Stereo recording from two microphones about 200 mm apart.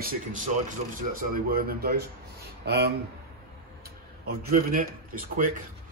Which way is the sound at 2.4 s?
55° right (ahead or behind).